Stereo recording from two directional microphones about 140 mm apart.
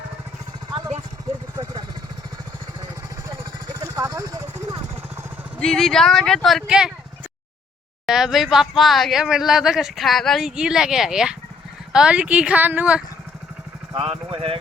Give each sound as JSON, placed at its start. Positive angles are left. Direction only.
{"t": 3.8, "sound": "vehicle", "side_deg": -25}
{"t": 5.5, "sound": "speech", "side_deg": 5}
{"t": 8.0, "sound": "speech", "side_deg": -5}
{"t": 13.9, "sound": "speech", "side_deg": -40}